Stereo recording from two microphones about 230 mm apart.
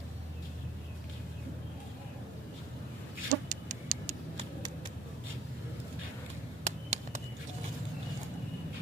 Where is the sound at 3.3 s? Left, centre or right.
Right.